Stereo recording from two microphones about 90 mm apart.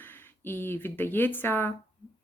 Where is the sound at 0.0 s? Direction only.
25° left (ahead or behind).